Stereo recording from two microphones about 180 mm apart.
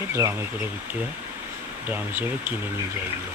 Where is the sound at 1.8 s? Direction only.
10° right (ahead or behind).